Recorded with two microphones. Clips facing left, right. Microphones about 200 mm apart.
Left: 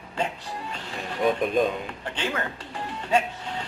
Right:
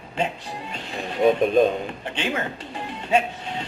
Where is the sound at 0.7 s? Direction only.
20° right (ahead or behind).